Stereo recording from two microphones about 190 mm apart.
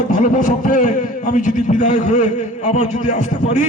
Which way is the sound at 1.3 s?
40° left (ahead or behind).